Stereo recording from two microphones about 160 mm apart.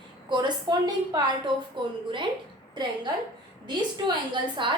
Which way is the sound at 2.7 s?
25° right (ahead or behind).